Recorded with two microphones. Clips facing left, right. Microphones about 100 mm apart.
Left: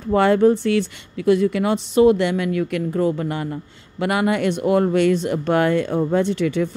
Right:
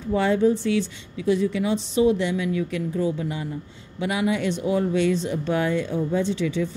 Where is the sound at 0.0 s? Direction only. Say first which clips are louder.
Left 5 dB; 60° left (ahead or behind).